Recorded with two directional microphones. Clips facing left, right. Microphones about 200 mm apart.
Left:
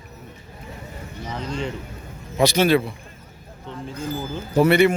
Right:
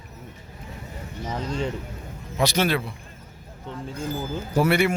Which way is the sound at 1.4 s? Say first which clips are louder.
Even; 40° right (ahead or behind).